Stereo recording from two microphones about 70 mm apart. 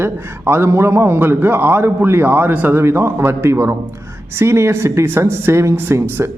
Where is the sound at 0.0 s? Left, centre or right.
Right.